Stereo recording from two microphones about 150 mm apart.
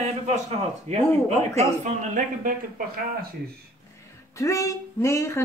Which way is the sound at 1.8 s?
60° right (ahead or behind).